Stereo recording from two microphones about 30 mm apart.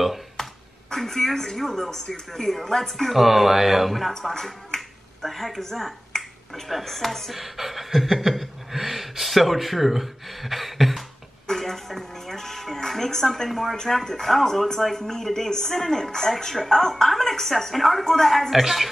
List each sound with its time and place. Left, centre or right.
0.4 s speech: centre
3.1 s speech: centre
4.1 s speech: centre
11.4 s music: centre
13.5 s speech: centre
18.5 s speech: centre